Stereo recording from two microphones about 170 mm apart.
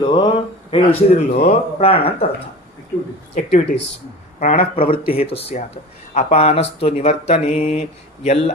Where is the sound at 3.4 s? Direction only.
45° left (ahead or behind).